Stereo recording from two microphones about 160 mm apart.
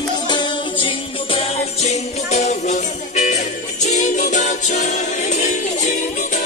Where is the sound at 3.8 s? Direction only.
45° left (ahead or behind).